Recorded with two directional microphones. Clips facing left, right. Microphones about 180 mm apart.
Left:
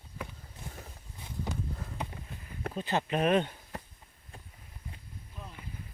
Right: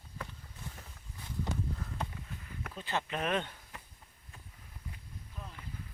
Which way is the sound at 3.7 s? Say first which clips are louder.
Left 10 dB; 35° left (ahead or behind).